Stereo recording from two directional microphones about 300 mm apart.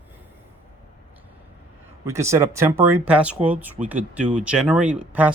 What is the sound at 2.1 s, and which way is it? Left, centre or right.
Speech, centre.